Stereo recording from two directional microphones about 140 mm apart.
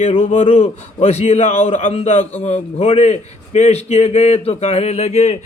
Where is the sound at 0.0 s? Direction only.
50° left (ahead or behind).